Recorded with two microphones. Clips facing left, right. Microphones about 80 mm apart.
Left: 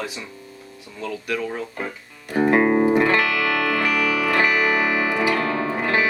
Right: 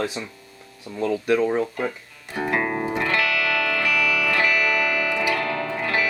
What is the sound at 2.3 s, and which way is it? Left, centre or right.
Music, left.